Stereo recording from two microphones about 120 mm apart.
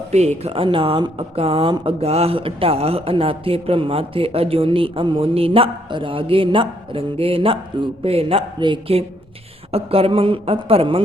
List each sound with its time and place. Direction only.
0.1 s speech: 65° right (ahead or behind)